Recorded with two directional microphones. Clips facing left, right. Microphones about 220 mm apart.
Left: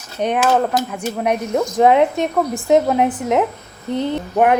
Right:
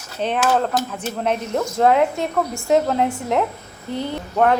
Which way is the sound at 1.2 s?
15° left (ahead or behind).